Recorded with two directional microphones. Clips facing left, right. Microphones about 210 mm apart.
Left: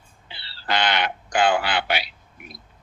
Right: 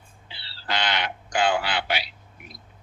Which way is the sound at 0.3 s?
60° left (ahead or behind).